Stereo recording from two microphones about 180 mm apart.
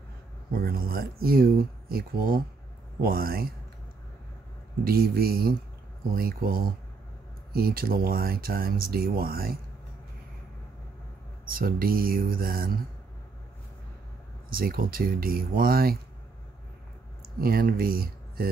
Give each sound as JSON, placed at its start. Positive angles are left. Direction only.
{"t": 0.5, "sound": "speech", "side_deg": -55}
{"t": 4.8, "sound": "speech", "side_deg": -55}
{"t": 11.5, "sound": "speech", "side_deg": -55}
{"t": 14.5, "sound": "speech", "side_deg": -55}
{"t": 17.4, "sound": "speech", "side_deg": -55}